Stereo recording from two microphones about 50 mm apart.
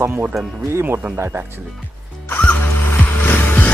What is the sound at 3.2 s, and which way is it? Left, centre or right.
Music, left.